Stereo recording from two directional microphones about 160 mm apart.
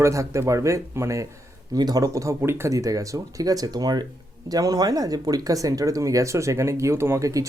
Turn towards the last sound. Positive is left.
turn(degrees=-20)  # may be behind; listen again after turning